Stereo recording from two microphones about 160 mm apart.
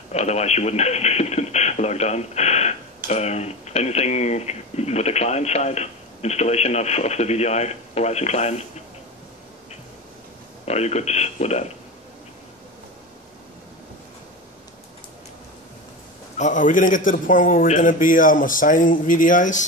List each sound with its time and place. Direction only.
0.1 s speech: 45° left (ahead or behind)
10.6 s speech: 45° left (ahead or behind)
16.3 s a man's voice: 50° left (ahead or behind)